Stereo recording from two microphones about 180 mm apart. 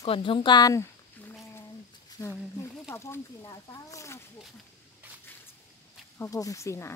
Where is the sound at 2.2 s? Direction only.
20° left (ahead or behind).